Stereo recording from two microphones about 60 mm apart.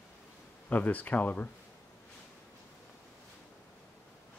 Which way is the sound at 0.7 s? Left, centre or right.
Left.